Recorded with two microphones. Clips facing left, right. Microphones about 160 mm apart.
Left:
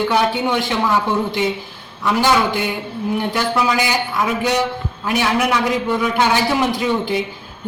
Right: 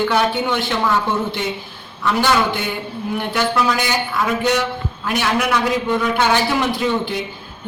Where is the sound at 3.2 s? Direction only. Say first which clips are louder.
Right 1 dB; 10° left (ahead or behind).